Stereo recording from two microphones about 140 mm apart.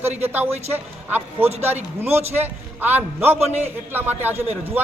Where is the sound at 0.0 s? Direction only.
50° right (ahead or behind).